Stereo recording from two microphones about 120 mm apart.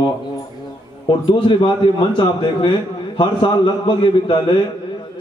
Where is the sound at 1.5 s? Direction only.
45° left (ahead or behind).